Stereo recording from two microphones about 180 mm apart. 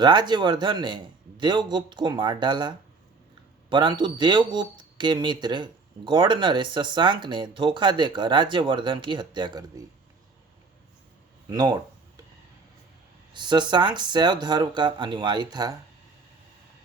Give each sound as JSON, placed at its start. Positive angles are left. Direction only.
{"t": 0.0, "sound": "speech", "side_deg": -25}
{"t": 11.4, "sound": "a sound", "side_deg": -20}
{"t": 13.3, "sound": "speech", "side_deg": -25}